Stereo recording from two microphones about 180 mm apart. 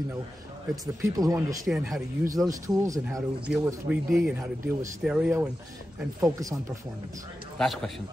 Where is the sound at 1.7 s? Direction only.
Centre (ahead or behind).